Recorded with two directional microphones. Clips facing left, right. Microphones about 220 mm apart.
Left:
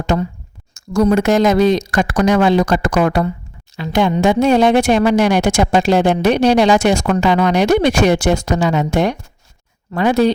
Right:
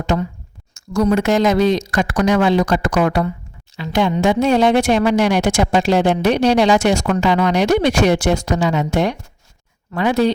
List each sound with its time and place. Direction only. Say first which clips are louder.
0.1 s speech: left 2 dB; 45° left (ahead or behind)